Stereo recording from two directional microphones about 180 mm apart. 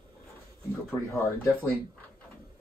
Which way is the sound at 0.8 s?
15° left (ahead or behind).